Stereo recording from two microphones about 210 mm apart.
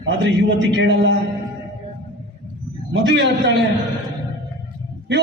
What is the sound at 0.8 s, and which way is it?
Speech, 60° right (ahead or behind).